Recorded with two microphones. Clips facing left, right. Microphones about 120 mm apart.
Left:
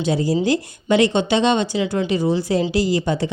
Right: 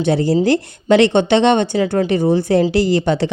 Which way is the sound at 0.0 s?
65° right (ahead or behind).